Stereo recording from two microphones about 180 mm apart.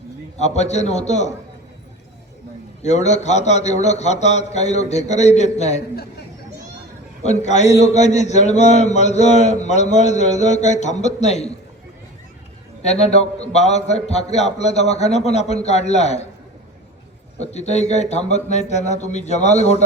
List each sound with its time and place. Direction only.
0.3 s a man's voice: 40° left (ahead or behind)
2.8 s a man's voice: 40° left (ahead or behind)
7.2 s a man's voice: 40° left (ahead or behind)
12.8 s a man's voice: 35° left (ahead or behind)
17.4 s a man's voice: 35° left (ahead or behind)